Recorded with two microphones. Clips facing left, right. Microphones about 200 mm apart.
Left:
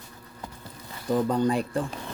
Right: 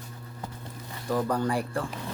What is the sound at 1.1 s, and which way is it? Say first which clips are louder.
Speech: left 3 dB; 20° left (ahead or behind).